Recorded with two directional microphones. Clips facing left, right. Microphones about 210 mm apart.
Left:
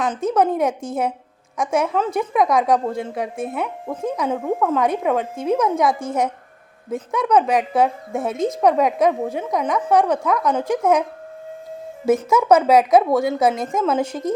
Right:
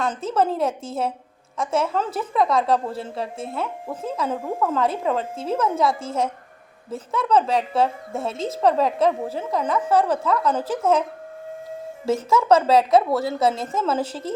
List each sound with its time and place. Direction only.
0.0 s a woman's voice: 15° left (ahead or behind)
12.0 s a woman's voice: 20° left (ahead or behind)